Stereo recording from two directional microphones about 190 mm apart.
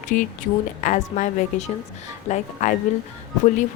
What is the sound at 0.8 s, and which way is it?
Speech, 40° left (ahead or behind).